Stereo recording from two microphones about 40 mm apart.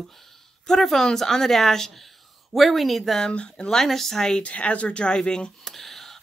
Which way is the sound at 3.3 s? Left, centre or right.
Left.